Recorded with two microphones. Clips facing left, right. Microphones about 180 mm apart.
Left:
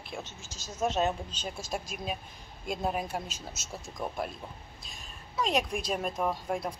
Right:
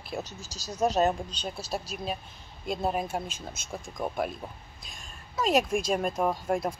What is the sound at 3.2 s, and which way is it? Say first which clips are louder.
Speech: right 3 dB; 55° right (ahead or behind).